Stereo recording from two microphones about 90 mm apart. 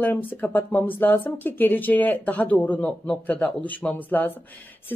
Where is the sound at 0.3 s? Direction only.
20° left (ahead or behind).